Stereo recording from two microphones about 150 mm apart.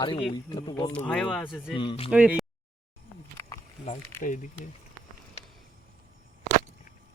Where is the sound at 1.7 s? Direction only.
35° left (ahead or behind).